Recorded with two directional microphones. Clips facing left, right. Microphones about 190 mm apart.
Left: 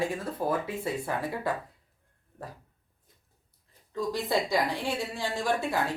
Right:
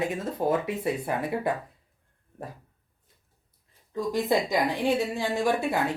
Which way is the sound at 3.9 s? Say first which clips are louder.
Right 3 dB; 15° right (ahead or behind).